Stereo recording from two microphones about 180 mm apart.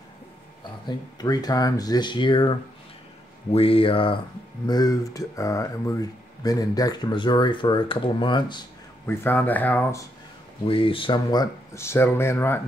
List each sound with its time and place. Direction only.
0.8 s speech: 20° left (ahead or behind)
3.5 s speech: 30° left (ahead or behind)
9.0 s speech: 10° left (ahead or behind)
10.6 s speech: 30° left (ahead or behind); by 12.6 s 10° left (ahead or behind)